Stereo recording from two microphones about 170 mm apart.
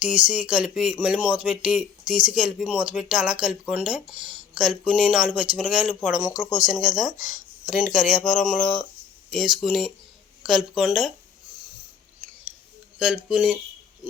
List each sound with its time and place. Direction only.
0.0 s speech: 5° right (ahead or behind)
7.2 s speech: 50° left (ahead or behind)
7.9 s speech: centre (ahead or behind)
13.0 s speech: 5° right (ahead or behind)